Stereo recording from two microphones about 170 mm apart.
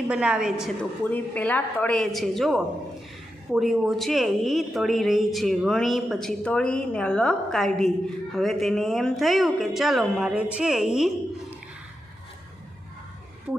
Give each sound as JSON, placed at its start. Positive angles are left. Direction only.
{"t": 0.1, "sound": "a woman's voice", "side_deg": -5}
{"t": 1.0, "sound": "a woman's voice", "side_deg": 10}
{"t": 13.5, "sound": "speech", "side_deg": -5}